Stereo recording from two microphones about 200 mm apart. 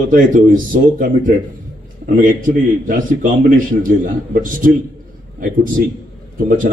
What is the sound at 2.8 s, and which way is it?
A man's voice, 45° right (ahead or behind).